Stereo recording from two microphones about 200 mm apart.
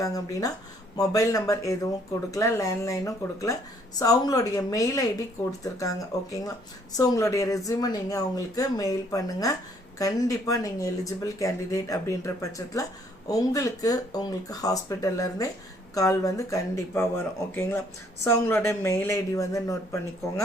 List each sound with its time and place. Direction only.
0.0 s speech: 15° left (ahead or behind)